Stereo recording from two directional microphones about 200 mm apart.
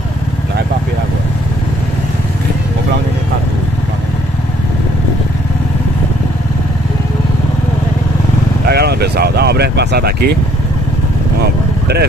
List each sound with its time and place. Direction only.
8.6 s speech: 55° right (ahead or behind)
11.4 s vehicle: 55° right (ahead or behind)